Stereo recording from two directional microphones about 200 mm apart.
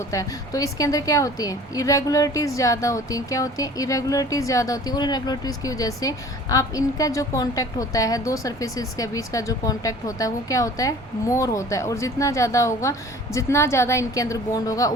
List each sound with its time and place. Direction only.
0.1 s a woman's voice: 15° left (ahead or behind)